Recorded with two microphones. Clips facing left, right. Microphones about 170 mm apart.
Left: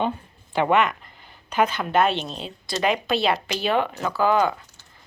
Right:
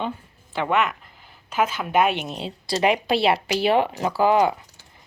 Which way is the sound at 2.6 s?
30° right (ahead or behind).